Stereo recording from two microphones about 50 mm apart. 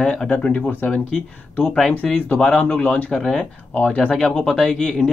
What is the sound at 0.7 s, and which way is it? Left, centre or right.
Speech, left.